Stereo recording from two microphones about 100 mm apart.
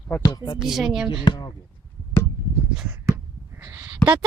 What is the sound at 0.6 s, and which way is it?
Speech, 5° right (ahead or behind).